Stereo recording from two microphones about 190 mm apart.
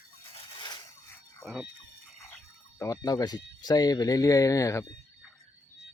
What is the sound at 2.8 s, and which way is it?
Speech, 20° left (ahead or behind).